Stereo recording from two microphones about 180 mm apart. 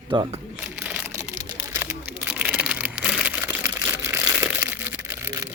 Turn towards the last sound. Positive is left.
turn(degrees=-10)  # may be behind; listen again after turning